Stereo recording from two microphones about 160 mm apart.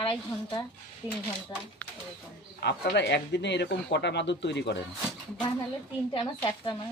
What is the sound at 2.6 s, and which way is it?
Speech, 90° left.